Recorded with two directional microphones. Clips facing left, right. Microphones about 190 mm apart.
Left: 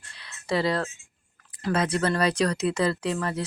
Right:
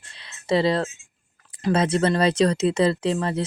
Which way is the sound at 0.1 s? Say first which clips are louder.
Right 5 dB; 25° right (ahead or behind).